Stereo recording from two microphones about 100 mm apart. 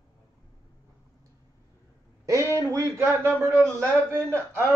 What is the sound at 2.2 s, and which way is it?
A man's voice, 30° right (ahead or behind).